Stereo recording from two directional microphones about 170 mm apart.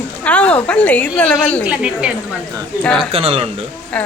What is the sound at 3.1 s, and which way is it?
Speech, 35° right (ahead or behind).